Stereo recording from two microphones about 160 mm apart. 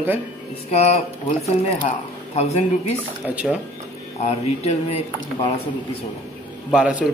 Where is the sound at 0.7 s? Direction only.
40° left (ahead or behind).